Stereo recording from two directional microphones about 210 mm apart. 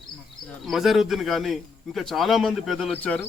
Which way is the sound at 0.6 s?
Centre (ahead or behind).